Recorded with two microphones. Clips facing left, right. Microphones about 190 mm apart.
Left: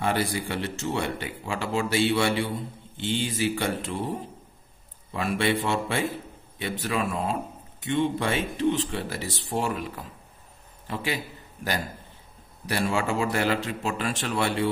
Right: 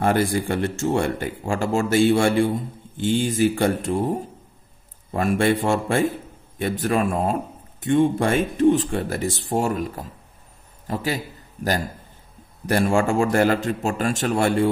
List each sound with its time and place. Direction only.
0.0 s a man's voice: 50° right (ahead or behind)
12.6 s speech: 50° right (ahead or behind)